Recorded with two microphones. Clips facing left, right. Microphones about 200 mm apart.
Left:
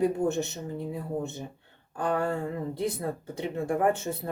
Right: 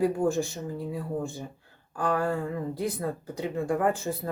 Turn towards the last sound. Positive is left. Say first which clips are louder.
# left 1 dB
turn(degrees=25)  # may be behind; listen again after turning